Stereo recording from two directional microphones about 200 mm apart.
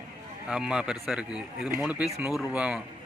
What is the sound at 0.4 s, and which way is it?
Speech, 5° right (ahead or behind).